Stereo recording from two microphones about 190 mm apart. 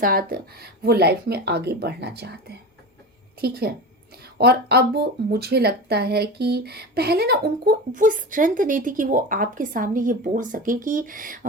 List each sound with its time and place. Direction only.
0.0 s speech: 50° right (ahead or behind)